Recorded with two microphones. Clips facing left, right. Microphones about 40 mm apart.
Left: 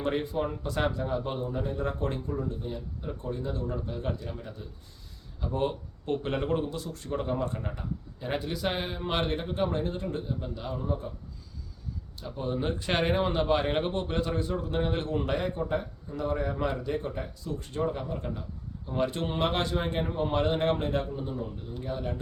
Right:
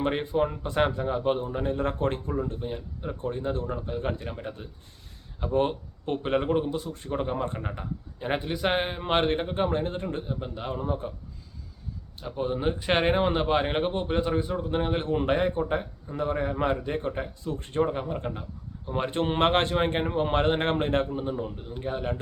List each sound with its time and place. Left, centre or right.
0.0 s a man's voice: right
5.5 s a man's voice: right
12.2 s a man's voice: right